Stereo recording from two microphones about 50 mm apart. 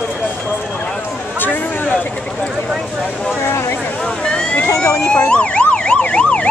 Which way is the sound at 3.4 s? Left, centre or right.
Left.